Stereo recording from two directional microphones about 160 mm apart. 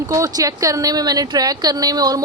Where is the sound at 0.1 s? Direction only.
20° right (ahead or behind).